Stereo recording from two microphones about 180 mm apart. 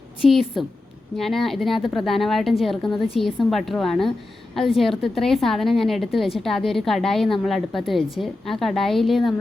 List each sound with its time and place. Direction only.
0.2 s a woman's voice: centre (ahead or behind)